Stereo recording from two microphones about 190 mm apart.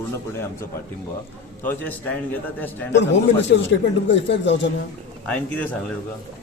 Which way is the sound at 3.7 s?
70° left (ahead or behind).